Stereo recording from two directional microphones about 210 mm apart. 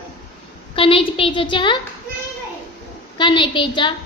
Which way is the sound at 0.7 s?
25° left (ahead or behind).